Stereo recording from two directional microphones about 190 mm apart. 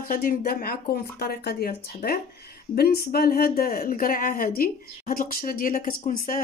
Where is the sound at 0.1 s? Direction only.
45° left (ahead or behind).